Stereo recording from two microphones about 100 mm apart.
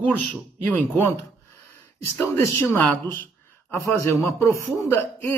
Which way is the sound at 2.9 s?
15° left (ahead or behind).